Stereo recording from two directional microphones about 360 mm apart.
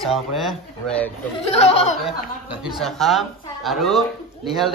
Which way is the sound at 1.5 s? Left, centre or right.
Centre.